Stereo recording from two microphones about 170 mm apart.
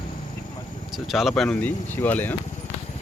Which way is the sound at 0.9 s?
Centre (ahead or behind).